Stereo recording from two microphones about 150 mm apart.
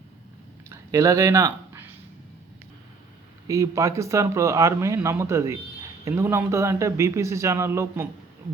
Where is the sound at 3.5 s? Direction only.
20° right (ahead or behind).